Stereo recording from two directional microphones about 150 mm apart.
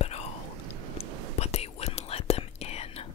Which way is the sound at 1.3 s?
45° left (ahead or behind).